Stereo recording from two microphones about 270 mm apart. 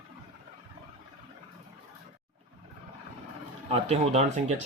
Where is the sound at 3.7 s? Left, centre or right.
Right.